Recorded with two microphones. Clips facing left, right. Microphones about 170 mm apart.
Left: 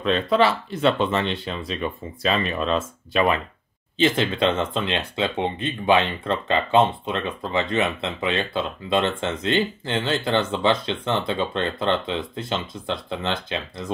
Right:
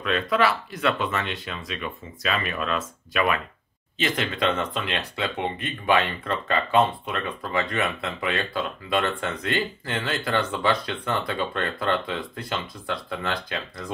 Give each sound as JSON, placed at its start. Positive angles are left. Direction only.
{"t": 0.0, "sound": "speech", "side_deg": 30}